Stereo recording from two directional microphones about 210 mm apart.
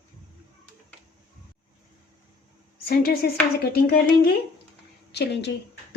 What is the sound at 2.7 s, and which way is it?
A woman's voice, 45° left (ahead or behind).